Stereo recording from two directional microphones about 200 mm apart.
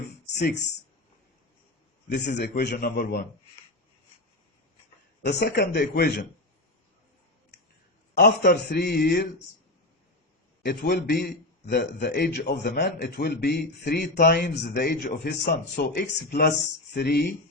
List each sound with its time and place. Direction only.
2.2 s a man's voice: 50° left (ahead or behind)
5.2 s a man's voice: 55° left (ahead or behind)
8.1 s a man's voice: 50° left (ahead or behind)
10.6 s a man's voice: 55° left (ahead or behind)